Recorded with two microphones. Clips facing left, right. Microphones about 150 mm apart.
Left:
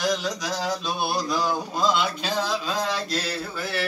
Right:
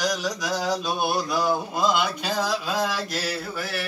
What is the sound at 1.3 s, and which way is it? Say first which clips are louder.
Speech: right 1 dB; 10° right (ahead or behind).